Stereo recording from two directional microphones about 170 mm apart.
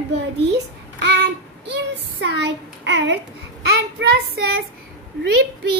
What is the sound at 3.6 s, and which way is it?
Child singing, 90° right.